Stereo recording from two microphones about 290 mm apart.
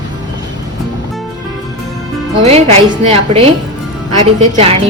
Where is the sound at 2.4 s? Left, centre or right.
Right.